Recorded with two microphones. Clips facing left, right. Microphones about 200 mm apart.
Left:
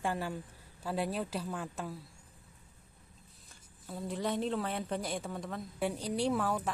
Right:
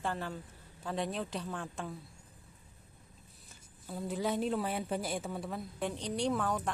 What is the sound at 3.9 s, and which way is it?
A woman's voice, centre (ahead or behind).